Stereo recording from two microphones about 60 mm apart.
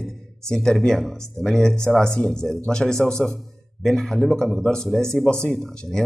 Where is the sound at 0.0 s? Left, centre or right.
Centre.